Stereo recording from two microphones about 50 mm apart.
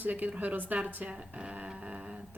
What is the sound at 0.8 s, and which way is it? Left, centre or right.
Speech, right.